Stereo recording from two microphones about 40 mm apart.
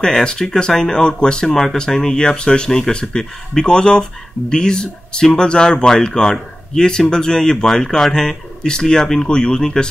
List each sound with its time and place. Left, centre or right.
0.0 s speech: centre